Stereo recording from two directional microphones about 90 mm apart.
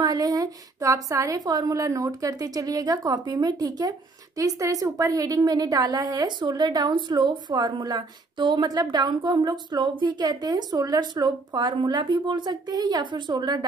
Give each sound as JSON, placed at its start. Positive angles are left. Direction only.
{"t": 0.0, "sound": "a woman's voice", "side_deg": -45}